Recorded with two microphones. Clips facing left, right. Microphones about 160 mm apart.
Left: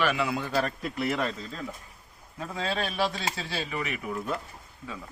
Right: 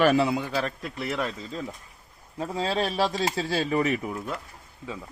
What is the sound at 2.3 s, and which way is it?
Speech, 30° right (ahead or behind).